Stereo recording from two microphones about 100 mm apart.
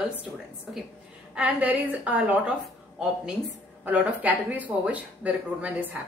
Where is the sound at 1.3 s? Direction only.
15° right (ahead or behind).